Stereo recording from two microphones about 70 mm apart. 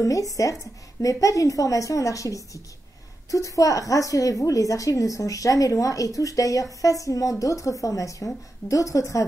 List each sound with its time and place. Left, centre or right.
0.0 s a woman's voice: left